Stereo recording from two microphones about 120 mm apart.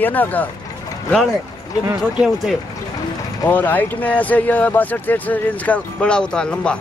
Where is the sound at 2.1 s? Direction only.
5° right (ahead or behind).